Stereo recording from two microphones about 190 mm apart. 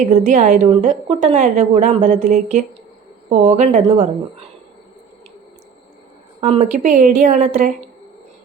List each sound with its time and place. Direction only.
0.0 s a woman's voice: 40° right (ahead or behind)
6.4 s a woman's voice: 35° right (ahead or behind)